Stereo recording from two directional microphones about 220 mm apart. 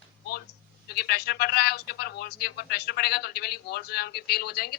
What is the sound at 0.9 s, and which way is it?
Speech, 45° left (ahead or behind).